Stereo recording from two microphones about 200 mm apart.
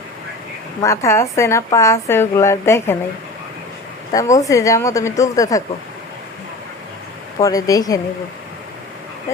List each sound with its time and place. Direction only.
0.8 s a woman's voice: 15° left (ahead or behind)
4.1 s a woman's voice: 15° left (ahead or behind)
7.4 s a woman's voice: 15° left (ahead or behind)